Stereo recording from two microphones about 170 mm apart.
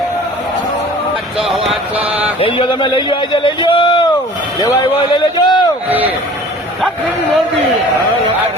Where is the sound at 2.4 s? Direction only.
30° left (ahead or behind).